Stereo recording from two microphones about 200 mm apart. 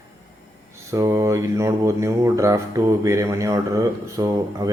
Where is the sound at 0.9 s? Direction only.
15° right (ahead or behind).